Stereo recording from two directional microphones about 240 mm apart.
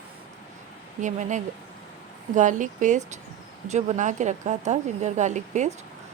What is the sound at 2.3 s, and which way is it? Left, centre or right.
Speech, right.